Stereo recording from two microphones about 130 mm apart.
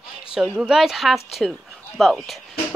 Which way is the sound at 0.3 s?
5° right (ahead or behind).